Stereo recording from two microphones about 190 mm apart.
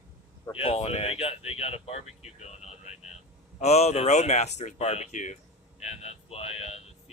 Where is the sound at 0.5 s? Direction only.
30° left (ahead or behind).